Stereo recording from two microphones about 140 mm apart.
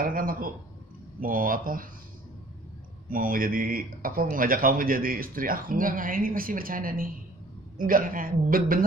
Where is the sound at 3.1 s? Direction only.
85° right.